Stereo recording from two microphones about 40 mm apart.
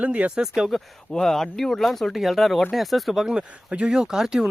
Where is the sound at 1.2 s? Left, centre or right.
Centre.